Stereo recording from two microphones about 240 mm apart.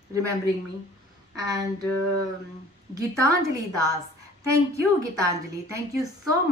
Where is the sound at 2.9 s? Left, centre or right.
Centre.